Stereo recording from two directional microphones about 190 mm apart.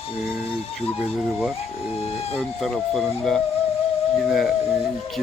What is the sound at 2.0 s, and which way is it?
Speech, 30° left (ahead or behind).